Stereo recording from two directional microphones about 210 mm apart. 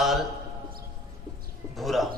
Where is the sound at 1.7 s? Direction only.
Centre (ahead or behind).